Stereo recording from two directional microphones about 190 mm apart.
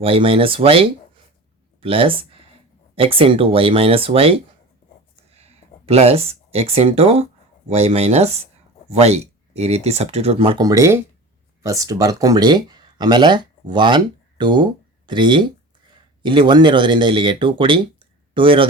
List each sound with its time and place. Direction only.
0.0 s speech: 30° right (ahead or behind)